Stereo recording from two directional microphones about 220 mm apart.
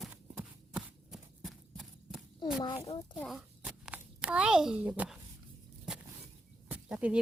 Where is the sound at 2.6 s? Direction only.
20° left (ahead or behind).